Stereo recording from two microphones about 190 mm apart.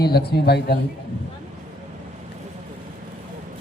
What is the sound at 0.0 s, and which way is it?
Speech, 55° left (ahead or behind).